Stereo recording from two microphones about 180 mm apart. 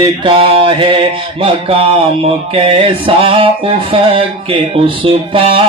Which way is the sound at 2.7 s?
30° right (ahead or behind).